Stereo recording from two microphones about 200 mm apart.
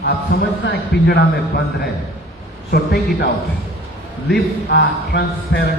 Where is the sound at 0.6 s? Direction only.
55° left (ahead or behind).